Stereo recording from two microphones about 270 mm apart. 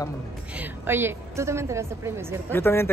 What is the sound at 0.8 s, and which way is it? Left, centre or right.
A woman's voice, centre.